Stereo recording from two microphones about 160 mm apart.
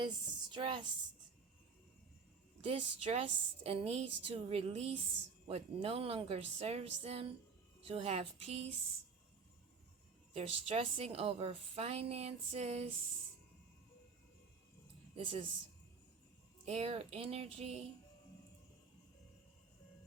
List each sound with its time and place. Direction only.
0.0 s a woman's voice: 30° right (ahead or behind)
2.6 s a woman's voice: 40° right (ahead or behind)
10.3 s a woman's voice: 40° right (ahead or behind)
15.1 s speech: 40° right (ahead or behind)
16.6 s a woman's voice: 40° right (ahead or behind)